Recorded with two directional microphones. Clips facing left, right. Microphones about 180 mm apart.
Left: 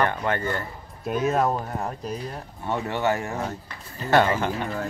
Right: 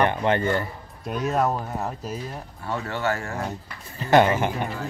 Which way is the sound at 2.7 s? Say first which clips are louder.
Left 2 dB; 20° left (ahead or behind).